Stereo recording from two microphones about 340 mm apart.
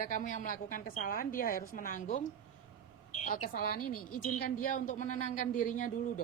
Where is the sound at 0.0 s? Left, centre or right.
Left.